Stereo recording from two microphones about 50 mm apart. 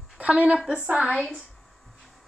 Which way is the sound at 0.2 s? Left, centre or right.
Right.